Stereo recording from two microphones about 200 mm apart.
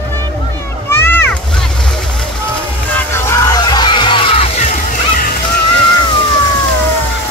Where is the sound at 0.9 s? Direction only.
10° left (ahead or behind).